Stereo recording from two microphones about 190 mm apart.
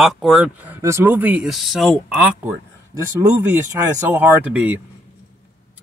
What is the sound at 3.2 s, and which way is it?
Speech, 15° right (ahead or behind).